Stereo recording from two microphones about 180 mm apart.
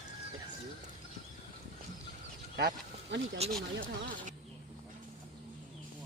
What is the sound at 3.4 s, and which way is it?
Speech, 35° right (ahead or behind).